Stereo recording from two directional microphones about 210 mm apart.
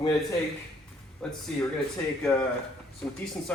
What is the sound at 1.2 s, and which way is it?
Speech, 5° left (ahead or behind).